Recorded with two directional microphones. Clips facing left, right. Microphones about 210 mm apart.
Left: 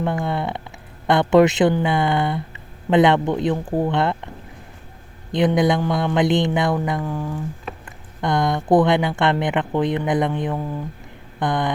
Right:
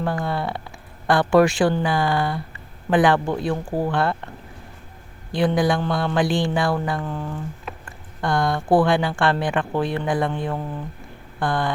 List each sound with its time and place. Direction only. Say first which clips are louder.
0.0 s speech: left 2 dB; 20° left (ahead or behind)
5.3 s speech: left 2 dB; 20° left (ahead or behind)
7.9 s a sound: left 1 dB; 20° left (ahead or behind)
8.7 s speech: left 2 dB; 20° left (ahead or behind)